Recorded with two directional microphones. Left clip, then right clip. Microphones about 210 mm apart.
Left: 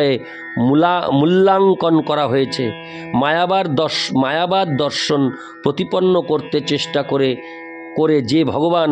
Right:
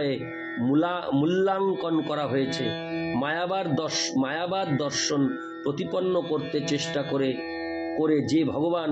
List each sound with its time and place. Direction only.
0.7 s speech: 50° left (ahead or behind)